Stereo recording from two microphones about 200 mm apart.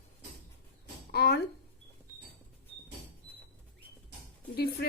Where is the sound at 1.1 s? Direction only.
50° left (ahead or behind).